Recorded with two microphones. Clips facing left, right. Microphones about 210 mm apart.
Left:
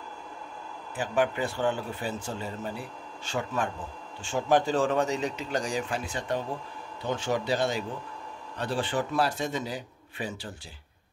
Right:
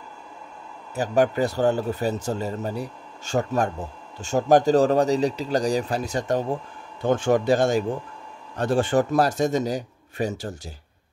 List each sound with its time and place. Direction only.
0.9 s a man's voice: 40° right (ahead or behind)